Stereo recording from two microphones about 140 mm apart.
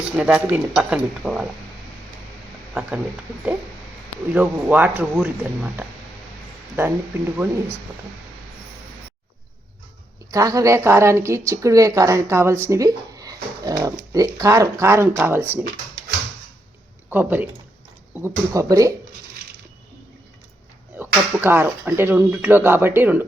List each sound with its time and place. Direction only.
0.1 s speech: 10° right (ahead or behind)
4.3 s speech: 10° right (ahead or behind)
10.3 s a woman's voice: 25° right (ahead or behind)
17.1 s a woman's voice: 15° right (ahead or behind)
21.0 s speech: 15° right (ahead or behind)